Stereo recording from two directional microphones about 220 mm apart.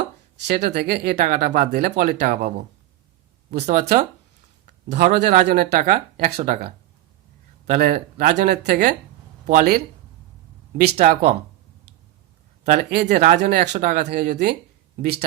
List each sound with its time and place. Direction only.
0.4 s speech: 50° right (ahead or behind)
3.7 s speech: 35° right (ahead or behind)
10.9 s speech: 35° right (ahead or behind)
12.7 s speech: 45° right (ahead or behind)